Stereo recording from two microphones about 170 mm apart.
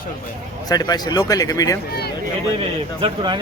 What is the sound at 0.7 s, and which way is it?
Speech, 25° left (ahead or behind).